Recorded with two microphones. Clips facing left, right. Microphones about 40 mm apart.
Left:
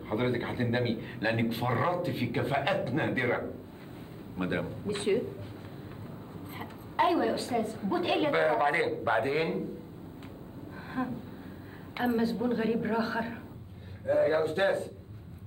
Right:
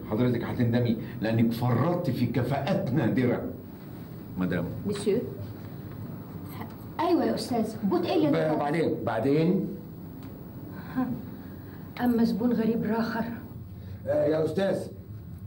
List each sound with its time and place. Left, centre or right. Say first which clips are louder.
0.1 s a man's voice: right 3 dB; left
6.6 s a man's voice: left 2 dB; left
10.9 s a sound: right 4 dB; left
12.0 s a man's voice: right 4 dB; left